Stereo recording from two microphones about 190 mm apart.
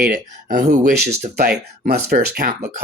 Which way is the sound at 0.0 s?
45° right (ahead or behind).